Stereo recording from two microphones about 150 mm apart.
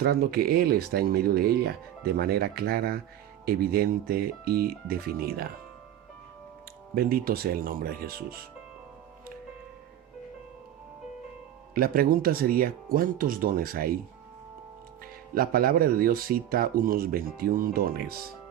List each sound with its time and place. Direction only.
0.0 s speech: 90° right
6.9 s speech: 80° right
11.7 s speech: 75° right (ahead or behind)
15.4 s speech: 85° right